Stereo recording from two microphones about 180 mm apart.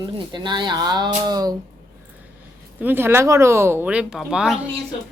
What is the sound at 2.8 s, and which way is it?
Speech, 10° right (ahead or behind).